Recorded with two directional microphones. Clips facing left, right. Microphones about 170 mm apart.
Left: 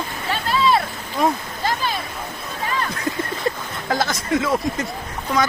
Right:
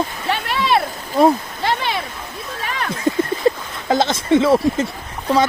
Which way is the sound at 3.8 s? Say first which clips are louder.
Right 5 dB; 25° right (ahead or behind).